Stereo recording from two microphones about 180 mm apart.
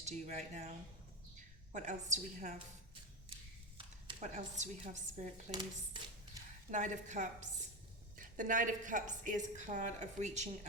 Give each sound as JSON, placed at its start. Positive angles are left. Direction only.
{"t": 0.0, "sound": "a woman's voice", "side_deg": -40}
{"t": 1.7, "sound": "a woman's voice", "side_deg": -45}
{"t": 3.8, "sound": "a sound", "side_deg": -25}
{"t": 4.2, "sound": "a woman's voice", "side_deg": -40}
{"t": 6.7, "sound": "a woman's voice", "side_deg": -45}